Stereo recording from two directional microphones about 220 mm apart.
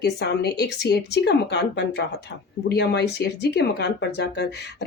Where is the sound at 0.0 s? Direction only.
50° left (ahead or behind).